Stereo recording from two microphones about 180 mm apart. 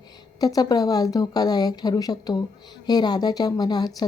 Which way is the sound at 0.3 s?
20° left (ahead or behind).